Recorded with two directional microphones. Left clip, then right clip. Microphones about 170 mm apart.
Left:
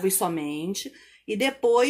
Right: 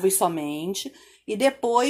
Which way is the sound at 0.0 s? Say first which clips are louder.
Right 3 dB; 20° right (ahead or behind).